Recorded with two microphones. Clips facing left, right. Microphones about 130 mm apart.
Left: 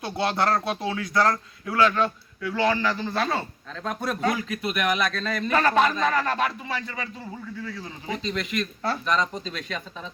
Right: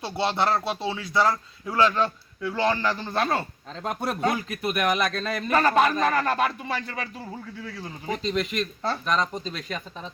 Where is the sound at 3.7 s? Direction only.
25° right (ahead or behind).